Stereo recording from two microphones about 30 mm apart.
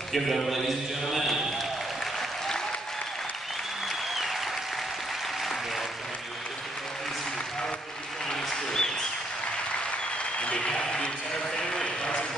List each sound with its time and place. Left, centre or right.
0.1 s a man's voice: centre
2.1 s applause: centre
4.1 s applause: centre
8.3 s applause: centre
10.4 s applause: left
10.9 s a sound: left